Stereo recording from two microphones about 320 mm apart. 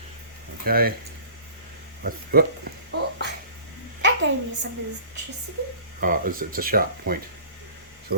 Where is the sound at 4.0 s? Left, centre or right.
Right.